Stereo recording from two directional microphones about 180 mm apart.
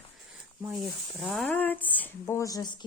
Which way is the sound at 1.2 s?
Centre (ahead or behind).